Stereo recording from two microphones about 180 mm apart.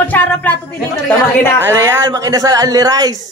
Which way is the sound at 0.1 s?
10° left (ahead or behind).